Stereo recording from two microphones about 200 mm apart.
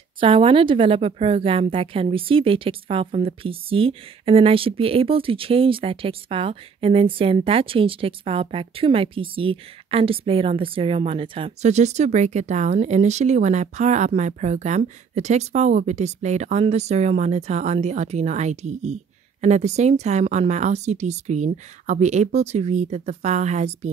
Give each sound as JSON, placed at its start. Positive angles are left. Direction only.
{"t": 0.2, "sound": "a woman's voice", "side_deg": -25}